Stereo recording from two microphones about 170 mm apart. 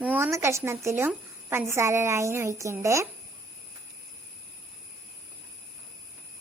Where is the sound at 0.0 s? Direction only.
10° right (ahead or behind).